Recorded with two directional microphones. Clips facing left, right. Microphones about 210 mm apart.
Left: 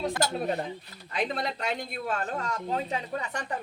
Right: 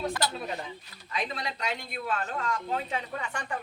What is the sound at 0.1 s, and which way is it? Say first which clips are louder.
Speech: left 4 dB; 50° left (ahead or behind).